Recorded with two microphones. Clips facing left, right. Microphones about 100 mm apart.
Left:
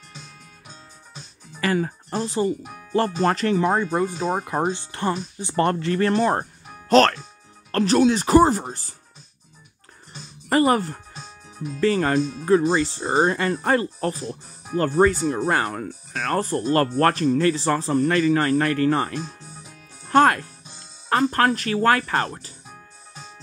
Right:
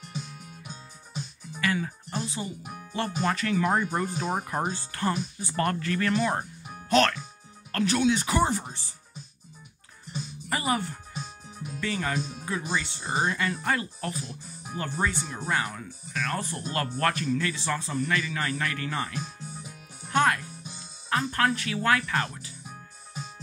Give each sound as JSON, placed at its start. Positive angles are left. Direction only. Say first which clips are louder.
{"t": 1.6, "sound": "speech", "louder": "left 6 dB", "side_deg": 40}
{"t": 10.5, "sound": "speech", "louder": "left 10 dB", "side_deg": 45}
{"t": 20.1, "sound": "music", "louder": "left 7 dB", "side_deg": 50}
{"t": 21.1, "sound": "speech", "louder": "left 6 dB", "side_deg": 55}